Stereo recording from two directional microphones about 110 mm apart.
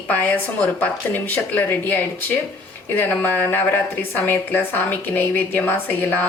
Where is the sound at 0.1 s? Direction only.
15° left (ahead or behind).